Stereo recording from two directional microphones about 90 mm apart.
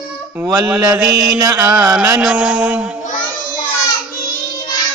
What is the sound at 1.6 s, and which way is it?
Mantra, 10° right (ahead or behind).